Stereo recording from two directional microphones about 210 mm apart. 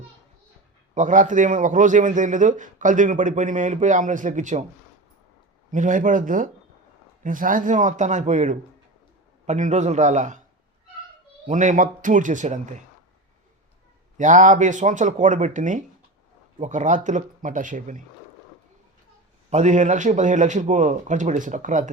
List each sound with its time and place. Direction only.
0.9 s a man's voice: 35° right (ahead or behind)
5.7 s a man's voice: 35° right (ahead or behind)
11.4 s a man's voice: 35° right (ahead or behind)
14.2 s a man's voice: 35° right (ahead or behind)
19.5 s a man's voice: 35° right (ahead or behind)